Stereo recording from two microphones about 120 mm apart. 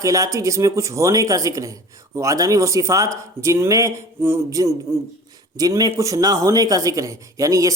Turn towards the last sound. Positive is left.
turn(degrees=-25)  # may be behind; listen again after turning